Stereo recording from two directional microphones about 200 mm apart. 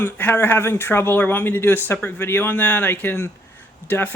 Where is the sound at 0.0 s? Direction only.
10° left (ahead or behind).